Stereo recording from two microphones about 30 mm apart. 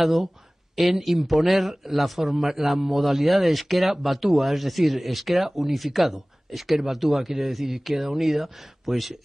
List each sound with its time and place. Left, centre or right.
0.0 s a man's voice: centre